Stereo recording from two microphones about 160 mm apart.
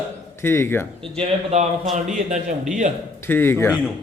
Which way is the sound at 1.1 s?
45° right (ahead or behind).